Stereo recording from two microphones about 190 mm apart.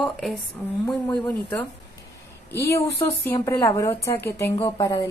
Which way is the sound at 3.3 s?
15° left (ahead or behind).